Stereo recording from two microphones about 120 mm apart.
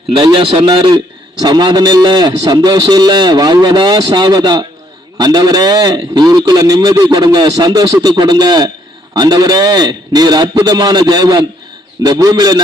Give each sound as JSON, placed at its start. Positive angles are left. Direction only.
{"t": 0.2, "sound": "a man's voice", "side_deg": -40}